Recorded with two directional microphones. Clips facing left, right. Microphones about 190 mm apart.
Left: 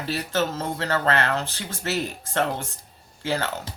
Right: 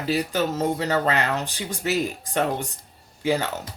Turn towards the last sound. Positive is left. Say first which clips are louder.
# right 3 dB
turn(degrees=-15)  # may be behind; listen again after turning